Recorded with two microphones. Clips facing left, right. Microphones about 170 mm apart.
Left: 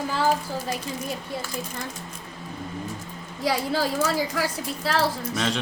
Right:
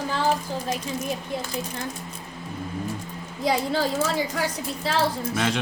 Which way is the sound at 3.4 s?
5° left (ahead or behind).